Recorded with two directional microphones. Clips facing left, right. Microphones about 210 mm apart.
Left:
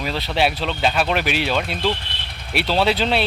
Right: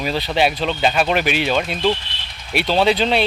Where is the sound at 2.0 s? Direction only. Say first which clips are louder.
Left 2 dB; 60° left (ahead or behind).